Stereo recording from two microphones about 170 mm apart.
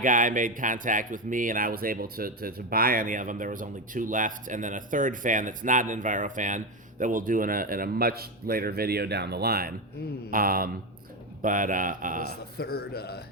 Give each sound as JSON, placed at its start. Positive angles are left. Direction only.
{"t": 0.0, "sound": "a man's voice", "side_deg": -50}
{"t": 12.5, "sound": "a man's voice", "side_deg": 65}